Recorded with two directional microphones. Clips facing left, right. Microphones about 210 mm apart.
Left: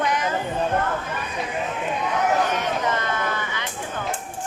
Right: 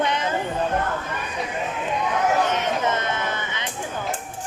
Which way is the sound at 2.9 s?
20° right (ahead or behind).